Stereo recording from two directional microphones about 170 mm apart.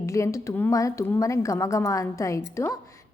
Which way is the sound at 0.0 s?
15° left (ahead or behind).